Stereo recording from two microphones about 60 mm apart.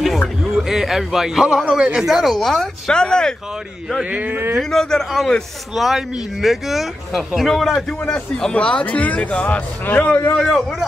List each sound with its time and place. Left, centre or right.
0.6 s speech: centre
4.0 s speech: right
4.6 s speech: centre
5.8 s speech: centre
8.1 s speech: centre
8.8 s speech: left
10.3 s speech: centre